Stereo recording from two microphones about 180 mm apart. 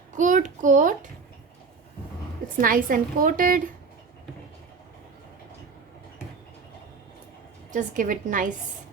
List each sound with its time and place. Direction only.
0.2 s a woman's voice: 45° right (ahead or behind)
2.6 s a woman's voice: 50° right (ahead or behind)
7.7 s a woman's voice: 45° right (ahead or behind)